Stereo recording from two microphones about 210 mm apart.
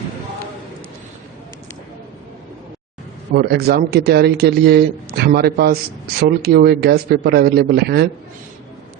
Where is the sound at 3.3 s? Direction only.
45° right (ahead or behind).